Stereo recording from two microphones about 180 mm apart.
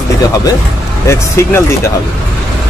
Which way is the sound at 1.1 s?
15° left (ahead or behind).